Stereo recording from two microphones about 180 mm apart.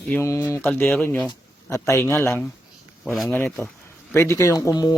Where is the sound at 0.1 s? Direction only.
15° left (ahead or behind).